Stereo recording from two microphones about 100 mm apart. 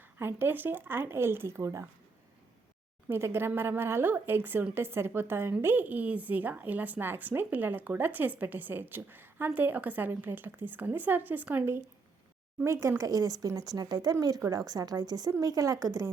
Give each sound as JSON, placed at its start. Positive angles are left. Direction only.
{"t": 0.0, "sound": "speech", "side_deg": -20}
{"t": 3.1, "sound": "speech", "side_deg": -25}